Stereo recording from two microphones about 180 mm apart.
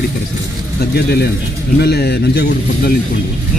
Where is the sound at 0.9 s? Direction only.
60° left (ahead or behind).